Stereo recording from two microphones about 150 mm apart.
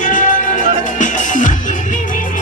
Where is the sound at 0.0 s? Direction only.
60° left (ahead or behind).